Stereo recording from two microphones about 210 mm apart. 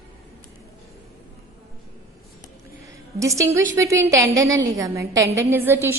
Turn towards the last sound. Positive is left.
turn(degrees=-10)  # may be behind; listen again after turning